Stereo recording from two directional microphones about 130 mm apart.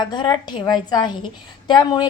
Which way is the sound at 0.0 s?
35° left (ahead or behind).